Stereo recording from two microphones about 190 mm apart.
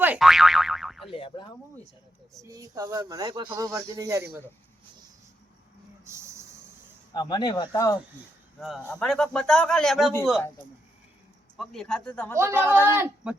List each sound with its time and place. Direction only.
0.0 s boing: 5° right (ahead or behind)
1.1 s speech: 25° left (ahead or behind)
2.4 s speech: 20° right (ahead or behind)
6.1 s a sound: 15° right (ahead or behind)
7.1 s speech: 20° left (ahead or behind)
8.9 s a man's voice: 5° left (ahead or behind)
11.5 s a man's voice: centre (ahead or behind)
12.4 s speech: 10° right (ahead or behind)